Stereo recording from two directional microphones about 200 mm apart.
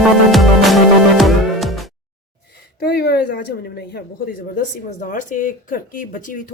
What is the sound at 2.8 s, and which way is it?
A woman's voice, 55° left (ahead or behind).